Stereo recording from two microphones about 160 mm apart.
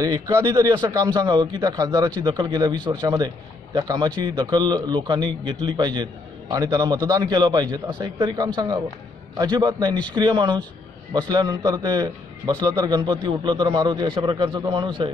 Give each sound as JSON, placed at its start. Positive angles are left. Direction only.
{"t": 0.0, "sound": "a man's voice", "side_deg": -20}